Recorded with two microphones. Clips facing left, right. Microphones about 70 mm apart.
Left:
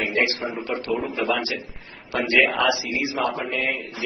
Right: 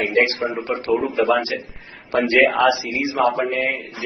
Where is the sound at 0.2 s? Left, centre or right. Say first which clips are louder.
Right 4 dB; right.